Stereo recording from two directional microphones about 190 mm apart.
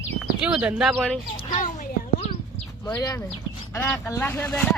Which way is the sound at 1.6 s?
40° left (ahead or behind).